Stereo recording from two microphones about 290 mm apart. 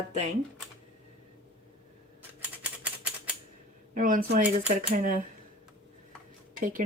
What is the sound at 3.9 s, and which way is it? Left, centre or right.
Speech, right.